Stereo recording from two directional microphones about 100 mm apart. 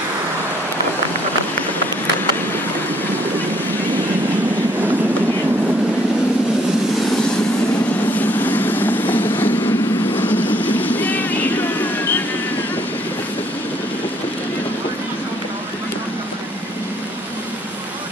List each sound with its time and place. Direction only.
8.1 s vehicle: 15° left (ahead or behind)